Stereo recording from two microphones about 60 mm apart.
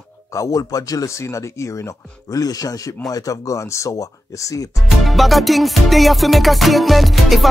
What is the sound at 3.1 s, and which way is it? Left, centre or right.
Speech, left.